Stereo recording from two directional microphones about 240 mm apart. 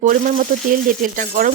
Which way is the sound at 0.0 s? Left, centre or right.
Right.